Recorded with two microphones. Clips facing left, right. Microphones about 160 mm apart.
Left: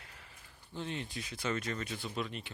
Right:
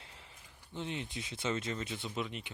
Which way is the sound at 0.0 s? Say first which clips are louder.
Even; 25° right (ahead or behind).